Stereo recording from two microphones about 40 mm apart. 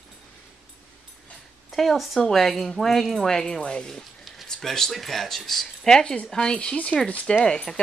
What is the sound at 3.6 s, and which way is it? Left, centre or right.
Speech, left.